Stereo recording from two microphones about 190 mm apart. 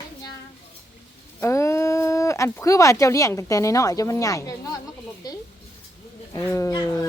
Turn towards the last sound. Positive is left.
turn(degrees=15)  # may be behind; listen again after turning